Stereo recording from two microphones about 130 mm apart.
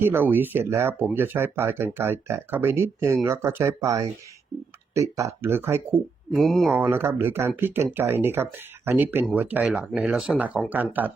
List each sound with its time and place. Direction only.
0.0 s speech: 15° right (ahead or behind)
6.3 s speech: centre (ahead or behind)
6.7 s speech: 15° right (ahead or behind)